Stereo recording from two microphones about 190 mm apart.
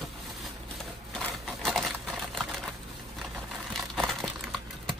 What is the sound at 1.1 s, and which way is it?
Typewriter, 5° left (ahead or behind).